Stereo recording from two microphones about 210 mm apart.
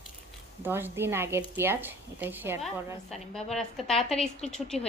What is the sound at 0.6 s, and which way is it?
Speech, 10° right (ahead or behind).